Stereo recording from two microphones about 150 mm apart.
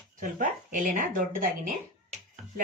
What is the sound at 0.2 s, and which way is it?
Speech, 60° right (ahead or behind).